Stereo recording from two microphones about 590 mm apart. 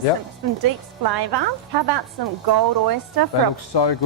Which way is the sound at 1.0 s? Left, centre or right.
Right.